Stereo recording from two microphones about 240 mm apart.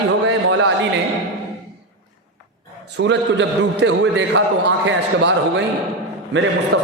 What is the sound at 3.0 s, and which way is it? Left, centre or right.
A man's voice, right.